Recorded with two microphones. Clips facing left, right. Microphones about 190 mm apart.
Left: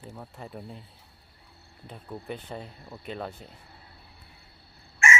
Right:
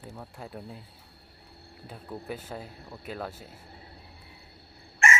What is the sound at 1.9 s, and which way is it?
Speech, centre (ahead or behind).